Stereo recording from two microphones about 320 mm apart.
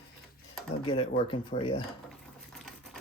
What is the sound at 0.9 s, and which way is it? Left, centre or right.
Speech, centre.